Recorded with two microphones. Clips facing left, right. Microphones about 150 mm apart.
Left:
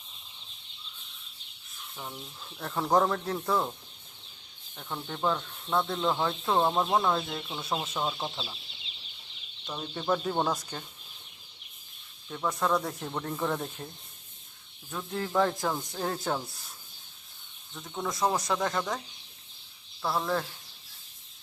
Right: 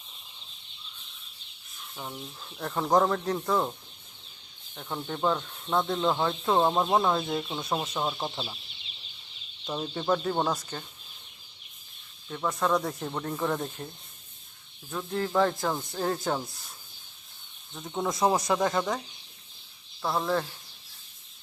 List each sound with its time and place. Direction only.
2.0 s speech: 5° right (ahead or behind)
4.8 s speech: 5° right (ahead or behind)
9.6 s speech: 15° right (ahead or behind)
9.9 s speech: centre (ahead or behind)
10.5 s speech: 10° left (ahead or behind)
12.3 s speech: centre (ahead or behind)
15.1 s speech: centre (ahead or behind)
17.7 s speech: 20° right (ahead or behind)
20.1 s speech: 5° right (ahead or behind)